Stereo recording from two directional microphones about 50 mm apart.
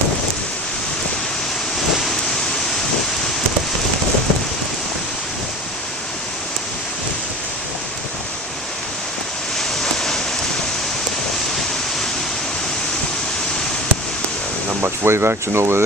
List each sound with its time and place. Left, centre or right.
9.6 s waves: centre
14.8 s speech: right